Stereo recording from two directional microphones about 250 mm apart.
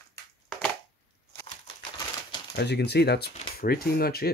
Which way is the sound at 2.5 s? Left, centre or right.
Left.